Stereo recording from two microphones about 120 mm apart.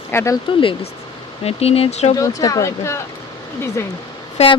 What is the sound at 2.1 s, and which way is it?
Speech, 30° left (ahead or behind).